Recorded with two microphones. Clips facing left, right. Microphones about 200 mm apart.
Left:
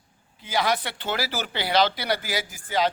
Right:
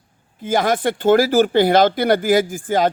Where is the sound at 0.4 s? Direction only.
50° right (ahead or behind).